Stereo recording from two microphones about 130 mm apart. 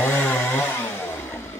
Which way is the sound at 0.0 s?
20° left (ahead or behind).